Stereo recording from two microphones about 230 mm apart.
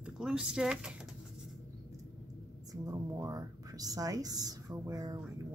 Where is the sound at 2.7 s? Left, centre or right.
Centre.